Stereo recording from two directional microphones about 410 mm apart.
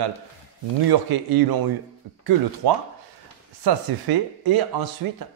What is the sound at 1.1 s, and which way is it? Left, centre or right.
Speech, right.